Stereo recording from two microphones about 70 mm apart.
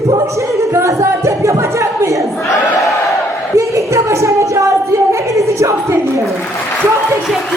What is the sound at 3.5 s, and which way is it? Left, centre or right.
Speech, right.